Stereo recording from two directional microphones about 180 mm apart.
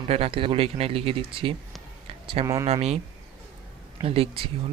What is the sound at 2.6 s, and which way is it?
Speech, 35° right (ahead or behind).